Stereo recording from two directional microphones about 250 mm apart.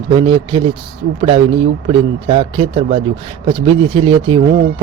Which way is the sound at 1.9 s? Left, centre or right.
Right.